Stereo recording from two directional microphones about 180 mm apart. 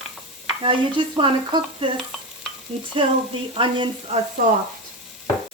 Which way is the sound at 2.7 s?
35° right (ahead or behind).